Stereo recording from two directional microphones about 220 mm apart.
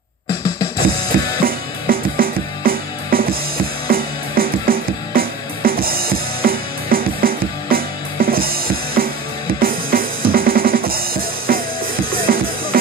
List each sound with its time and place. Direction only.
1.4 s music: 40° right (ahead or behind)
9.6 s drum kit: 40° right (ahead or behind)